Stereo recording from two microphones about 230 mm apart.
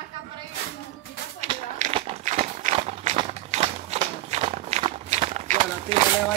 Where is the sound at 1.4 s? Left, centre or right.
Right.